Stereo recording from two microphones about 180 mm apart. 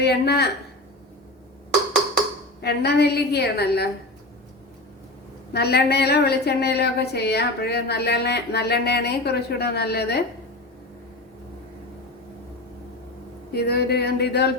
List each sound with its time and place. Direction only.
0.0 s a woman's voice: 65° left (ahead or behind)
2.6 s a woman's voice: 65° left (ahead or behind)
5.5 s a woman's voice: 65° left (ahead or behind)
13.5 s a woman's voice: 65° left (ahead or behind)